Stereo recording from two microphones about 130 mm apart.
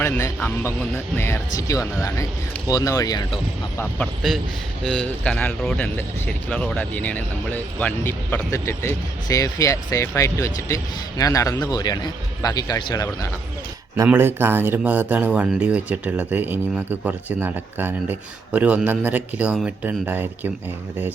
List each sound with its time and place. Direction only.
0.0 s speech: 15° left (ahead or behind); by 3.4 s 30° left (ahead or behind)
3.8 s speech: 10° left (ahead or behind); by 13.1 s 30° left (ahead or behind)
13.9 s speech: 20° right (ahead or behind)